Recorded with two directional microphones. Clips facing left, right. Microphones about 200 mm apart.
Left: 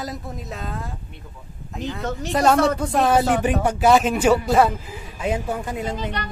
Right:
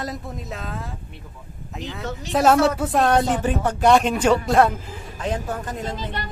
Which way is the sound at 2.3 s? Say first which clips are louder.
Right 1 dB; centre (ahead or behind).